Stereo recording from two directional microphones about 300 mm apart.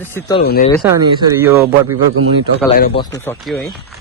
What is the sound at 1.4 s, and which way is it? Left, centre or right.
Speech, centre.